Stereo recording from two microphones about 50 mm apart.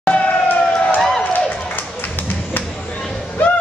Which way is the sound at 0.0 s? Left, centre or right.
Left.